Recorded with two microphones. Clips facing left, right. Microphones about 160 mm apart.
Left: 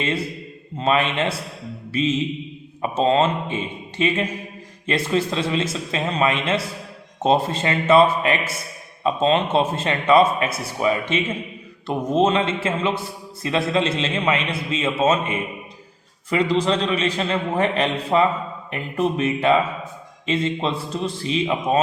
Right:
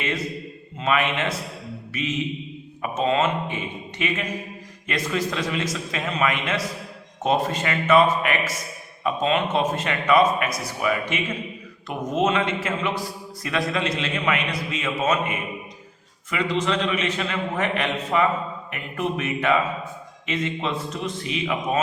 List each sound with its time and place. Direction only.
0.0 s a man's voice: 30° left (ahead or behind)